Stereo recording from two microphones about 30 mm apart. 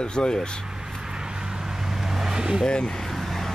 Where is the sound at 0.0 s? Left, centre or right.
Left.